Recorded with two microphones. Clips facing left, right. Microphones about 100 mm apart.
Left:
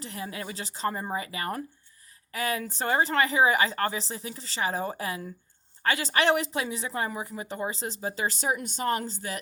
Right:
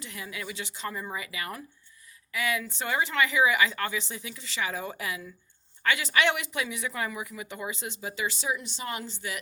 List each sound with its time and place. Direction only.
0.0 s a woman's voice: 35° left (ahead or behind)